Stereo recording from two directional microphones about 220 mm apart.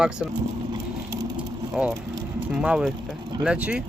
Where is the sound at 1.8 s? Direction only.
5° right (ahead or behind).